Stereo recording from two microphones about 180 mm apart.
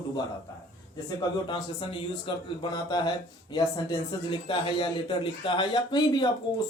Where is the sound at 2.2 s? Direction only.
25° left (ahead or behind).